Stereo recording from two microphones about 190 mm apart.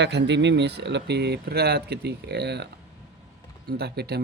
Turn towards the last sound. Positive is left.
turn(degrees=-55)  # may be behind; listen again after turning